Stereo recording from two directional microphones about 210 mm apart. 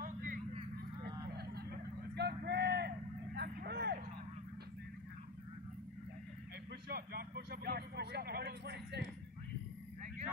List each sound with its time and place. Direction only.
0.0 s vehicle: 40° right (ahead or behind)
6.9 s vehicle: 50° right (ahead or behind)